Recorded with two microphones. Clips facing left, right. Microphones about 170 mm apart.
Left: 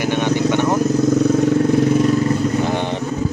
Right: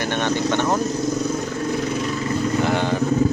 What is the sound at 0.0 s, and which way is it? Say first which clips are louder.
Vehicle: left 4 dB; 10° left (ahead or behind).